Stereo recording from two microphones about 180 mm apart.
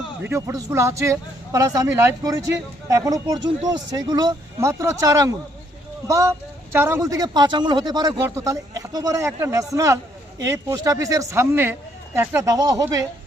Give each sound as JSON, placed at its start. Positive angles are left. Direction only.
{"t": 0.2, "sound": "speech", "side_deg": -15}